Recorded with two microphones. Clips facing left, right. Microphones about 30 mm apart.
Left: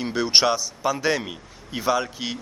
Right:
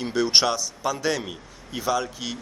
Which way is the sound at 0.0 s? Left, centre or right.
Centre.